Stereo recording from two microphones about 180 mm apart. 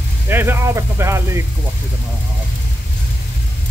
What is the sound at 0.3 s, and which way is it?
Speech, 15° right (ahead or behind).